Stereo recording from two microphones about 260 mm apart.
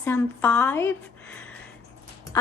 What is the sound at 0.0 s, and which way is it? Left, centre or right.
Speech, centre.